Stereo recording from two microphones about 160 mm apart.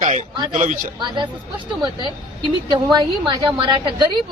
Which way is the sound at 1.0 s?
30° right (ahead or behind).